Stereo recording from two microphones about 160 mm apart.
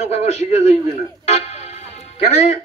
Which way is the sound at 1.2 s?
45° left (ahead or behind).